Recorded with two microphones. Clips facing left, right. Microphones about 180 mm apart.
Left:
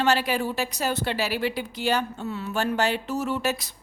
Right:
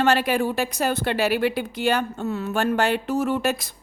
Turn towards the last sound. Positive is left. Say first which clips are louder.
# right 4 dB
turn(degrees=-50)  # may be behind; listen again after turning